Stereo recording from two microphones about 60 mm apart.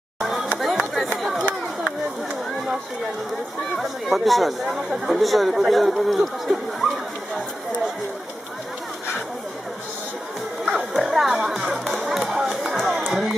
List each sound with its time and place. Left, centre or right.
0.2 s a sound: centre
3.7 s speech: centre
10.7 s music: centre
12.7 s run: centre